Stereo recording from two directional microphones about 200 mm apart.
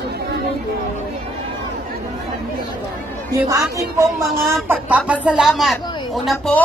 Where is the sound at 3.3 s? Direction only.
15° right (ahead or behind).